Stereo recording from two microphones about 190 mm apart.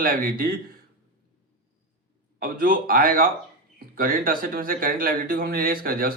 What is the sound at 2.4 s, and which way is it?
Speech, 45° right (ahead or behind).